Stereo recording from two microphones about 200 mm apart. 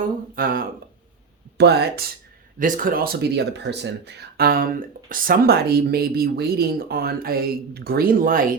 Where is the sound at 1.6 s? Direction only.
55° right (ahead or behind).